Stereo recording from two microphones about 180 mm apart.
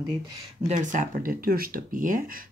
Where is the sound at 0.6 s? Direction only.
45° right (ahead or behind).